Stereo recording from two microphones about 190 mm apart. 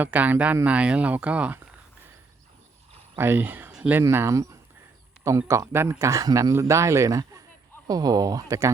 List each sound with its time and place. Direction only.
0.0 s a man's voice: 10° right (ahead or behind)
3.2 s a man's voice: 10° right (ahead or behind)